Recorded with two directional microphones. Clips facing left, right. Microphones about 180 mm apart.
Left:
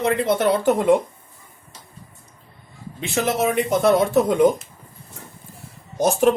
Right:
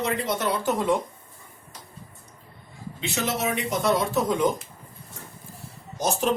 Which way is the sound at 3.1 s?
55° left (ahead or behind).